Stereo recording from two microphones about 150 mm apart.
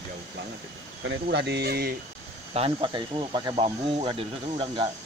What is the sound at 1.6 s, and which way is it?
Speech, 90° right.